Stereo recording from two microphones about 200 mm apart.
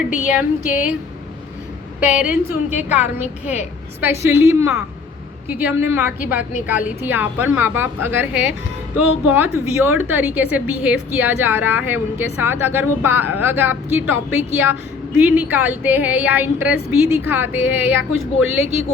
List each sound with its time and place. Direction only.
0.1 s a woman's voice: 40° left (ahead or behind)
0.3 s speech: 5° right (ahead or behind)
2.0 s speech: 5° right (ahead or behind)
3.0 s a woman's voice: 35° left (ahead or behind)
4.2 s speech: 15° right (ahead or behind)
18.6 s a woman's voice: 30° left (ahead or behind)